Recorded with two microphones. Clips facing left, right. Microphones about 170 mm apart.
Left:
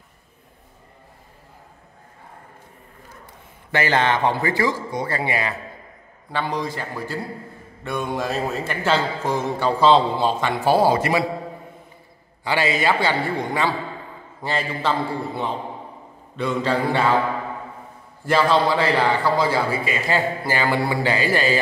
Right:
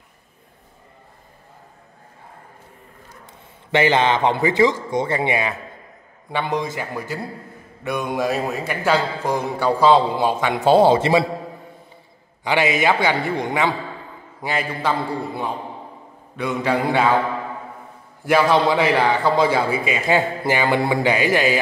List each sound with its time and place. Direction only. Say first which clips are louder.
3.7 s a man's voice: right 3 dB; 20° right (ahead or behind)
12.4 s a man's voice: right 2 dB; 20° right (ahead or behind)
18.2 s a man's voice: right 2 dB; 15° right (ahead or behind)